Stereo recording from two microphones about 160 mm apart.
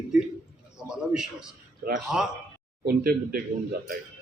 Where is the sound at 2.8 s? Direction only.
70° right (ahead or behind).